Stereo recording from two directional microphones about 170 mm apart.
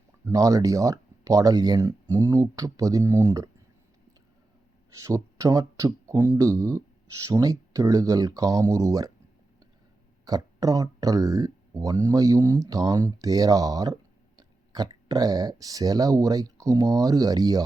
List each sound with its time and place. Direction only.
0.3 s speech: 20° right (ahead or behind)
4.9 s speech: 20° right (ahead or behind)
10.2 s speech: 20° right (ahead or behind)